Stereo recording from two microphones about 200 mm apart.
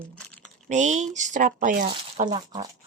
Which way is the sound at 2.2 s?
25° right (ahead or behind).